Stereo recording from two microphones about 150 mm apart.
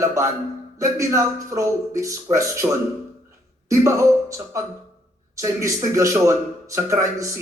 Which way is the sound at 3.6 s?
20° right (ahead or behind).